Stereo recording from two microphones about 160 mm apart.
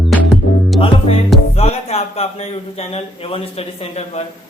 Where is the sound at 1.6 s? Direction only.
40° left (ahead or behind).